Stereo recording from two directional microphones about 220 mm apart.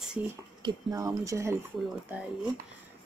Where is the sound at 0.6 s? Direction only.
20° right (ahead or behind).